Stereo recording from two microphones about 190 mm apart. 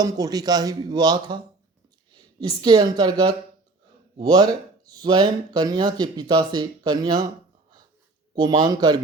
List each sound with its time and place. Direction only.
0.0 s speech: 20° right (ahead or behind)
8.4 s speech: 20° right (ahead or behind)